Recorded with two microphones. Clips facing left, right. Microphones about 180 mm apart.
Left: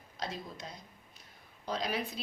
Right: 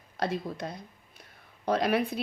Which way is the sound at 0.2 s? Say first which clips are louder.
Right 9 dB; 60° right (ahead or behind).